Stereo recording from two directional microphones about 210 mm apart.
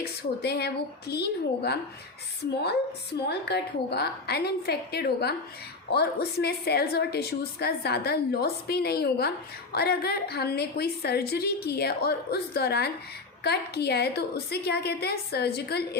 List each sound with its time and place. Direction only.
0.0 s a woman's voice: 50° left (ahead or behind)